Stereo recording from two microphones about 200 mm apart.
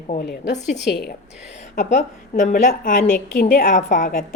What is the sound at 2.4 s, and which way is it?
A woman's voice, 45° left (ahead or behind).